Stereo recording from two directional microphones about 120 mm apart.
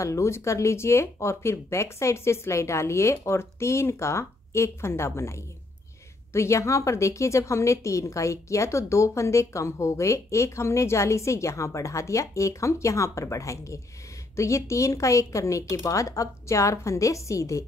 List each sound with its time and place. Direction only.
0.0 s a woman's voice: 25° left (ahead or behind)